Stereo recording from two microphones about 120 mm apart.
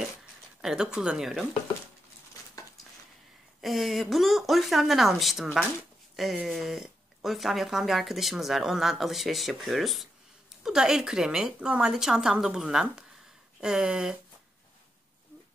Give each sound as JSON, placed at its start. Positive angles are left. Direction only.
{"t": 0.6, "sound": "speech", "side_deg": -5}
{"t": 2.6, "sound": "a sound", "side_deg": 30}
{"t": 3.6, "sound": "speech", "side_deg": 0}